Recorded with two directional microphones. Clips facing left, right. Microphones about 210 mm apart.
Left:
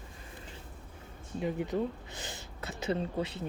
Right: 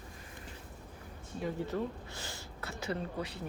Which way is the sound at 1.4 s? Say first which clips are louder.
Left 3 dB; 15° left (ahead or behind).